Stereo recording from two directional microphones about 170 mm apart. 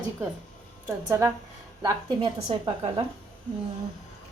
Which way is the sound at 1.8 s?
25° right (ahead or behind).